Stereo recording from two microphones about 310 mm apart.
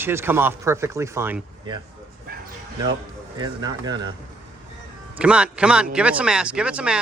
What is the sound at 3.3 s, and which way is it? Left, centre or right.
Speech, centre.